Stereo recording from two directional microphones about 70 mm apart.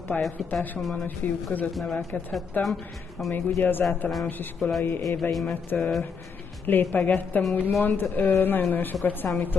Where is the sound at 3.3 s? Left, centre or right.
Left.